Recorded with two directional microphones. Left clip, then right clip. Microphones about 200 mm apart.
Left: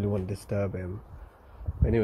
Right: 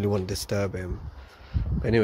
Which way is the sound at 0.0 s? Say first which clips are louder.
Right 5 dB; centre (ahead or behind).